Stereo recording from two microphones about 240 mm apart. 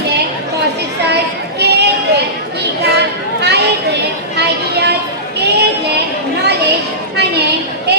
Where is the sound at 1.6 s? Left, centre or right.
Right.